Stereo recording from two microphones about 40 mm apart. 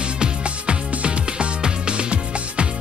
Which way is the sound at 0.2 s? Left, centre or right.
Right.